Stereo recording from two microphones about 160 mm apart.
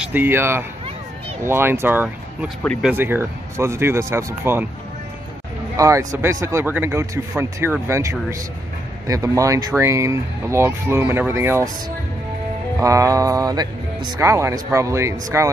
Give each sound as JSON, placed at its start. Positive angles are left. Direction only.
{"t": 0.1, "sound": "speech", "side_deg": -15}
{"t": 5.8, "sound": "speech", "side_deg": -20}
{"t": 12.8, "sound": "mantra", "side_deg": -20}
{"t": 14.1, "sound": "speech", "side_deg": -20}